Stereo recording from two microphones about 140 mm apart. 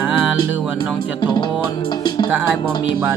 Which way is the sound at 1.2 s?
35° left (ahead or behind).